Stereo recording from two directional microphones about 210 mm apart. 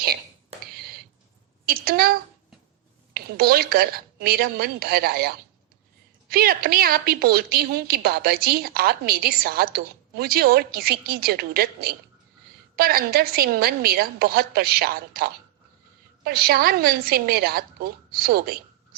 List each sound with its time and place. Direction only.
1.6 s a sound: 45° right (ahead or behind)
3.1 s a woman's voice: 45° right (ahead or behind)
6.3 s a woman's voice: 45° right (ahead or behind)